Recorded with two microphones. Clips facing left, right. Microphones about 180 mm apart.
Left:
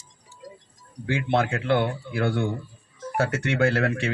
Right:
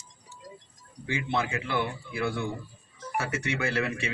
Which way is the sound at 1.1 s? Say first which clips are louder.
Left 6 dB; 70° left (ahead or behind).